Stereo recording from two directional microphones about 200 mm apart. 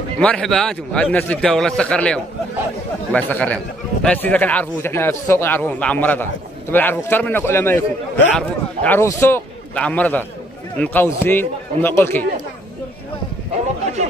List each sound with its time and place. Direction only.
0.2 s a man's voice: 5° left (ahead or behind)